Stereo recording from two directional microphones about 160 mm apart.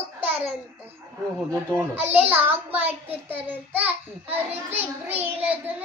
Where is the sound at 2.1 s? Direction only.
10° right (ahead or behind).